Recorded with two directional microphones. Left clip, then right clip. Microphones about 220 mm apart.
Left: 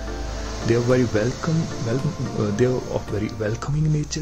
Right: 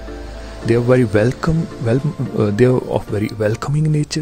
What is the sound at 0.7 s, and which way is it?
Speech, 35° right (ahead or behind).